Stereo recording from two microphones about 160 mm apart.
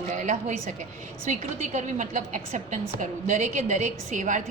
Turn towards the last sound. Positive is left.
turn(degrees=-50)  # may be behind; listen again after turning